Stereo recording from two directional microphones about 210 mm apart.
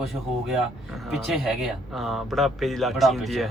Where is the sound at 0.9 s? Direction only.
Centre (ahead or behind).